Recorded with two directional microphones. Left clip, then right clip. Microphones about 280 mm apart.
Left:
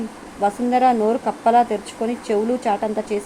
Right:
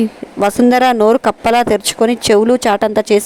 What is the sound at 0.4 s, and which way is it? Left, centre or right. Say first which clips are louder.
Speech: right 6 dB; right.